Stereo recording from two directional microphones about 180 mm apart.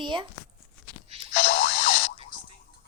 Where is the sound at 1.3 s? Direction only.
50° left (ahead or behind).